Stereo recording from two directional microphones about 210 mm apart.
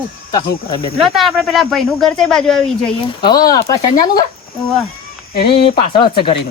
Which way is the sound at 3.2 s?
20° left (ahead or behind).